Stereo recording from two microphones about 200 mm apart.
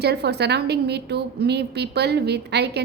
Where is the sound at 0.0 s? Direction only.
55° right (ahead or behind).